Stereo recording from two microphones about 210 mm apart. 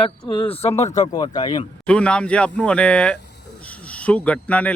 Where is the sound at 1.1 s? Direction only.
20° left (ahead or behind).